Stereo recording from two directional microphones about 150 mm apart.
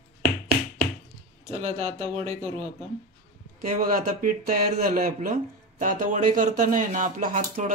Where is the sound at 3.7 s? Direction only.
65° right (ahead or behind).